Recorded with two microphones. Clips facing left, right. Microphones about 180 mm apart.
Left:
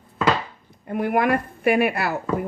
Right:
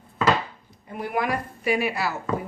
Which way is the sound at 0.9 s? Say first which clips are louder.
Left 6 dB; 55° left (ahead or behind).